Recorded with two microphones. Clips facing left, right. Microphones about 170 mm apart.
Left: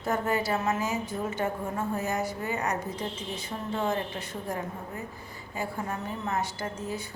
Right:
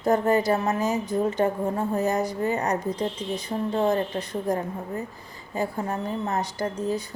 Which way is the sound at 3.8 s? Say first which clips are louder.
Right 6 dB; 35° right (ahead or behind).